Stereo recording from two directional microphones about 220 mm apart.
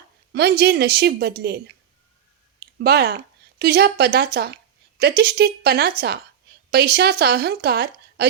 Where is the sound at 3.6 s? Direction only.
50° right (ahead or behind).